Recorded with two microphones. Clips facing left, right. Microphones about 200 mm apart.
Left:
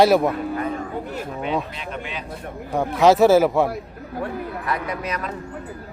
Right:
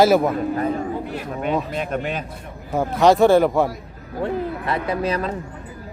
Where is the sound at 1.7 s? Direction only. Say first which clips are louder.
Right 7 dB; 45° right (ahead or behind).